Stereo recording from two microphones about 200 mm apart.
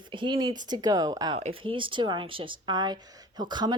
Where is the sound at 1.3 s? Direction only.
30° right (ahead or behind).